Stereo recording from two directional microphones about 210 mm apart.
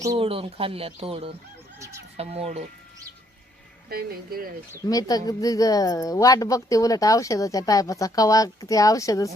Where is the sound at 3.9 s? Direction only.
45° right (ahead or behind).